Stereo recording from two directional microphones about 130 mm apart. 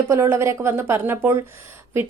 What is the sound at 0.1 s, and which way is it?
A woman's voice, 20° right (ahead or behind).